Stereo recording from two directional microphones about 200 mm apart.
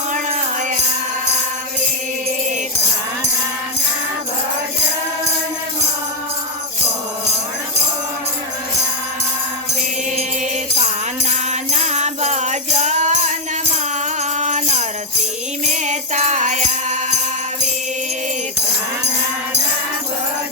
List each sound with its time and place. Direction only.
11.3 s jingle bell: 35° right (ahead or behind)
14.3 s music: 35° right (ahead or behind)